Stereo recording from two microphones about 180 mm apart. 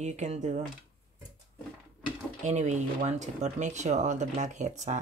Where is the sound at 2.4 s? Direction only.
40° right (ahead or behind).